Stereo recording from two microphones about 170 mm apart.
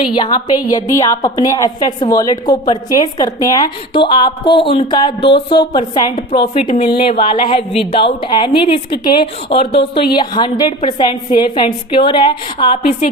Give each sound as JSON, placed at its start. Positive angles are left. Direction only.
{"t": 0.2, "sound": "a woman's voice", "side_deg": 25}